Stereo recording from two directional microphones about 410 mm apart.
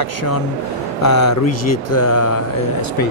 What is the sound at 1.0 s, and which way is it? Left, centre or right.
Speech, left.